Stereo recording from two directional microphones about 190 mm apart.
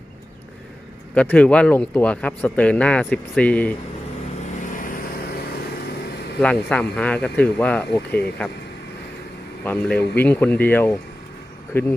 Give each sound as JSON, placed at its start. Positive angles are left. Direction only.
{"t": 1.1, "sound": "speech", "side_deg": 5}
{"t": 4.7, "sound": "vehicle", "side_deg": 45}
{"t": 6.4, "sound": "speech", "side_deg": 5}
{"t": 9.6, "sound": "speech", "side_deg": 5}